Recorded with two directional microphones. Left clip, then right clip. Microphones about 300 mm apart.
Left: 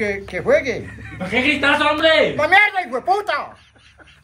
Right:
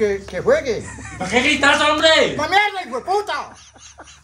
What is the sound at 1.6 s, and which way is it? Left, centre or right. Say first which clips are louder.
Speech: right 1 dB; right.